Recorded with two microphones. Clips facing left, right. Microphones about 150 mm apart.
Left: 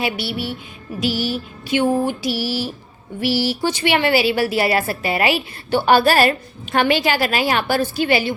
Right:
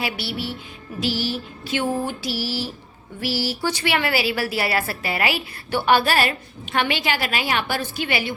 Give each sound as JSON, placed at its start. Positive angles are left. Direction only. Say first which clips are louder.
{"t": 0.0, "sound": "a woman's voice", "louder": "left 4 dB", "side_deg": 20}
{"t": 0.9, "sound": "a sound", "louder": "left 3 dB", "side_deg": 15}
{"t": 3.2, "sound": "a woman's voice", "louder": "left 5 dB", "side_deg": 20}